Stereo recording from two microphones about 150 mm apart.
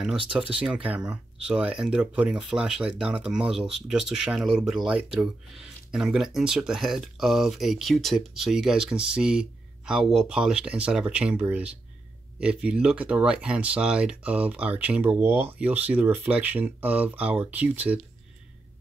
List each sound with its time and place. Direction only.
0.3 s speech: 5° right (ahead or behind)